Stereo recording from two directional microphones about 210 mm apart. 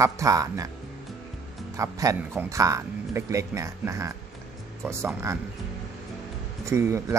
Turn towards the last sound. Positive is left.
turn(degrees=-15)  # may be behind; listen again after turning